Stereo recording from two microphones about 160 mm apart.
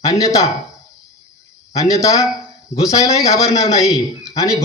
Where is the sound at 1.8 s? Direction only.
20° left (ahead or behind).